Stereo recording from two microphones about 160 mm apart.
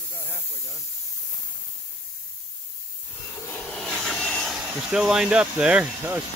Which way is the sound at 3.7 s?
Centre (ahead or behind).